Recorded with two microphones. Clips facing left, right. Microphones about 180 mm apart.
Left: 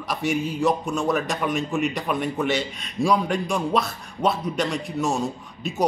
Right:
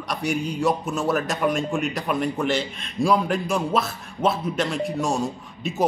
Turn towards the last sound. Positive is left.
turn(degrees=0)  # may be behind; listen again after turning